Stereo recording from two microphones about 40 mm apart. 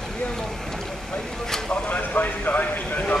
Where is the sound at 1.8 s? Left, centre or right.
Left.